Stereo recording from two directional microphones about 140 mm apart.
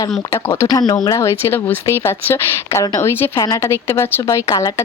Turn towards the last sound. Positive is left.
turn(degrees=20)  # may be behind; listen again after turning